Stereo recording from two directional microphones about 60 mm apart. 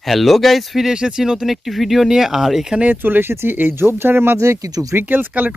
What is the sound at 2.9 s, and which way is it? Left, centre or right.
Speech, right.